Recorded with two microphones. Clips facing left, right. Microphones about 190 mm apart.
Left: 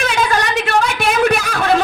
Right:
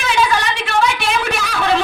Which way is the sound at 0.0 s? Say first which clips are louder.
Even; 45° left (ahead or behind).